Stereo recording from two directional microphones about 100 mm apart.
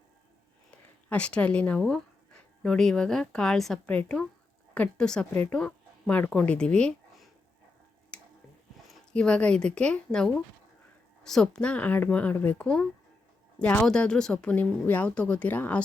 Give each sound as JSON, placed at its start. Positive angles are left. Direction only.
{"t": 1.1, "sound": "speech", "side_deg": 10}
{"t": 8.1, "sound": "tick-tock", "side_deg": 10}
{"t": 9.1, "sound": "speech", "side_deg": 10}